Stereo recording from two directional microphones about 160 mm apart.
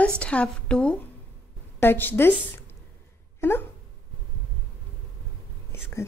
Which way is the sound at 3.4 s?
15° left (ahead or behind).